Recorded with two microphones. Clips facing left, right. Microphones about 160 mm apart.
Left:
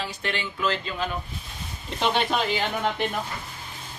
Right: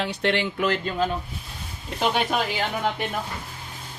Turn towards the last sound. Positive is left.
turn(degrees=-5)  # may be behind; listen again after turning